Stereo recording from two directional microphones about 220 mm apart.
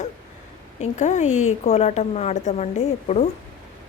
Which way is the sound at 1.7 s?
30° left (ahead or behind).